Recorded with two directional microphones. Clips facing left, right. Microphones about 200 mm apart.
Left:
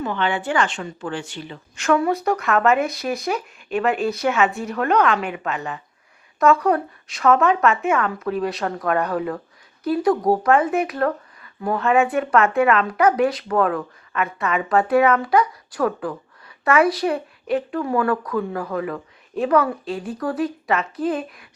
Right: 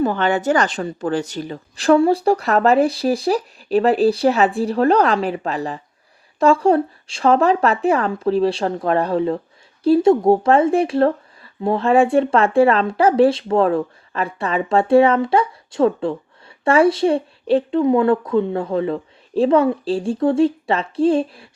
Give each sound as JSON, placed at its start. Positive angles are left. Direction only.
{"t": 0.0, "sound": "speech", "side_deg": -40}